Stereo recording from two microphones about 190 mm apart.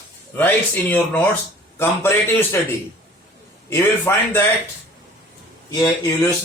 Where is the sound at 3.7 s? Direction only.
10° left (ahead or behind).